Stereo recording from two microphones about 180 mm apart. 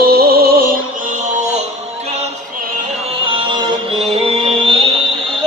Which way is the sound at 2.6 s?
35° right (ahead or behind).